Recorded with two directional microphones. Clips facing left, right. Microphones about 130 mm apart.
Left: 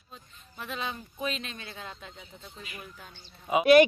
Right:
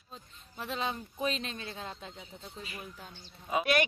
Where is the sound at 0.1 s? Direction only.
30° right (ahead or behind).